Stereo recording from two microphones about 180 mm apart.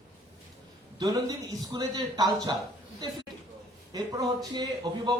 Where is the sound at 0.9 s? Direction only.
20° right (ahead or behind).